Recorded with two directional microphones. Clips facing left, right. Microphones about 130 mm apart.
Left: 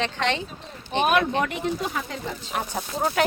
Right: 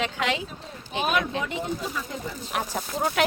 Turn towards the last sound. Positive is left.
turn(degrees=0)  # may be behind; listen again after turning